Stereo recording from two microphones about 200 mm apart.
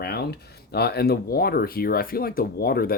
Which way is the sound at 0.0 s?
55° left (ahead or behind).